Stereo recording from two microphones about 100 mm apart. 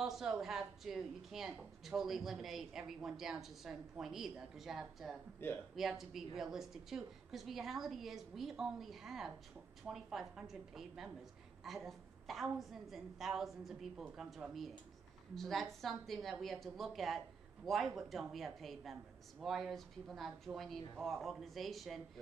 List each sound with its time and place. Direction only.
0.0 s a woman's voice: 5° right (ahead or behind)
5.4 s speech: 20° left (ahead or behind)
5.8 s a woman's voice: 5° right (ahead or behind)